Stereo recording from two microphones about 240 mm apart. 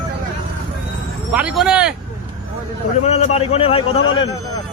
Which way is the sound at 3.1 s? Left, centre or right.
Left.